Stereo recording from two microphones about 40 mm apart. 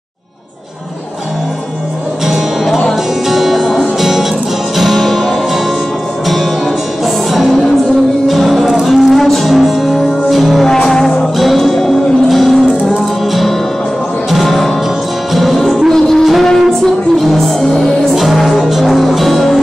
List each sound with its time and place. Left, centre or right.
2.2 s music: centre
7.3 s music: centre
10.9 s music: centre
11.3 s music: centre